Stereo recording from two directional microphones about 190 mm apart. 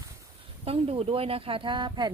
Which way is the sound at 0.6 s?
30° right (ahead or behind).